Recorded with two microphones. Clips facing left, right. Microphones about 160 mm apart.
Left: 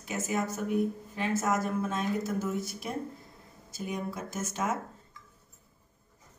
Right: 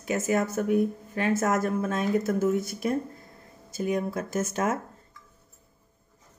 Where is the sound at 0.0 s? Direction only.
65° right (ahead or behind).